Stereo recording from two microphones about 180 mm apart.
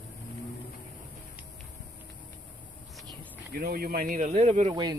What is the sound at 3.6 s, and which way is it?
Speech, 55° right (ahead or behind).